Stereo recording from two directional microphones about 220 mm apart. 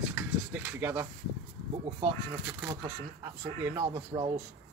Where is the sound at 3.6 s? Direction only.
20° right (ahead or behind).